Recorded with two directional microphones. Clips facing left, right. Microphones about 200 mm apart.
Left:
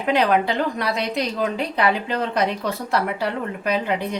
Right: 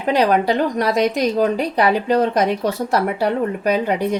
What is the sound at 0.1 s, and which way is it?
A woman's voice, 40° right (ahead or behind).